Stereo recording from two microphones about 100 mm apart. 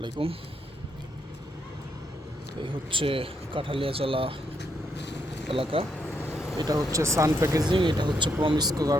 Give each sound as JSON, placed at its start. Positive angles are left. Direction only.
{"t": 0.0, "sound": "speech", "side_deg": -65}
{"t": 2.6, "sound": "speech", "side_deg": -55}
{"t": 5.5, "sound": "speech", "side_deg": -60}
{"t": 6.6, "sound": "speech", "side_deg": -40}
{"t": 7.6, "sound": "speech", "side_deg": -50}